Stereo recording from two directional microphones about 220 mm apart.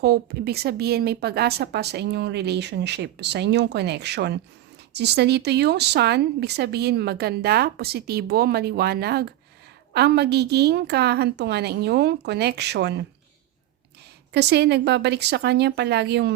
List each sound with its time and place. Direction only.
0.0 s a woman's voice: 45° right (ahead or behind)
14.3 s a woman's voice: 50° right (ahead or behind)